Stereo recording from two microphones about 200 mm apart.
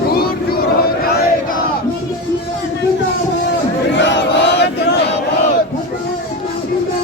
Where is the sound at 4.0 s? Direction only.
60° left (ahead or behind).